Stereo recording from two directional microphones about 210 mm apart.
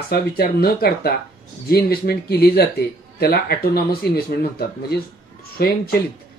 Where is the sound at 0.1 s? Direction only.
45° left (ahead or behind).